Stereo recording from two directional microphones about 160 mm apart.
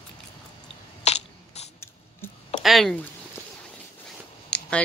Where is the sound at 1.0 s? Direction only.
45° left (ahead or behind).